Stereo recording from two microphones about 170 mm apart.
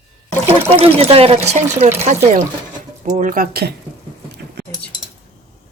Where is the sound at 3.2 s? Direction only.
55° right (ahead or behind).